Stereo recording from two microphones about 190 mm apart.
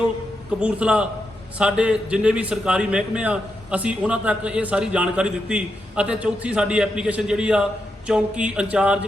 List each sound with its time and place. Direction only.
0.6 s a man's voice: 5° right (ahead or behind)